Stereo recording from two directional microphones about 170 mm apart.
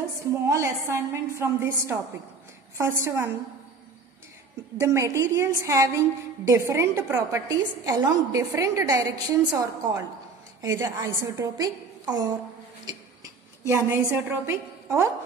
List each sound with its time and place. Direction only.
0.5 s a woman's voice: 15° right (ahead or behind)
4.7 s a woman's voice: 15° right (ahead or behind)
12.8 s a sound: 20° right (ahead or behind)